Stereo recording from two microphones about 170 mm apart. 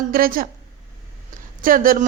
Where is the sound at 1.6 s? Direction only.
55° right (ahead or behind).